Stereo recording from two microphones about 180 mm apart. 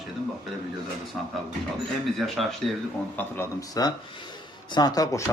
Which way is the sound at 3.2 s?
15° left (ahead or behind).